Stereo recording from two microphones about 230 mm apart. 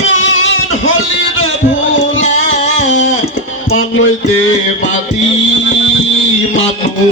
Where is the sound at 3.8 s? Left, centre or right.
Left.